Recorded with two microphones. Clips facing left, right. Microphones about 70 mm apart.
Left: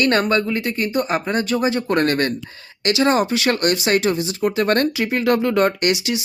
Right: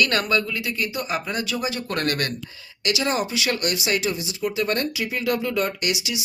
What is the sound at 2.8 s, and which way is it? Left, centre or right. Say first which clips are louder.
Speech: left 7 dB; left.